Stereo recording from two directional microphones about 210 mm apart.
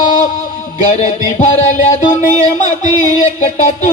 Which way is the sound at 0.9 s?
35° left (ahead or behind).